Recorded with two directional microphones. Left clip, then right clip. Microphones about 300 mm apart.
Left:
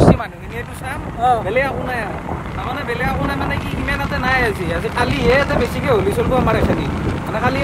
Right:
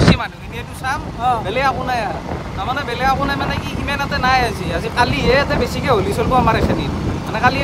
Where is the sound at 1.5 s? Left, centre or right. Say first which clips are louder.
Right 1 dB; centre.